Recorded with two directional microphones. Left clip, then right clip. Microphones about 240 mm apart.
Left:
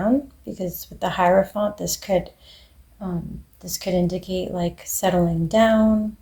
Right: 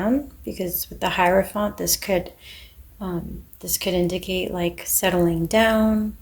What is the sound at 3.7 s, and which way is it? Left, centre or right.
Speech, right.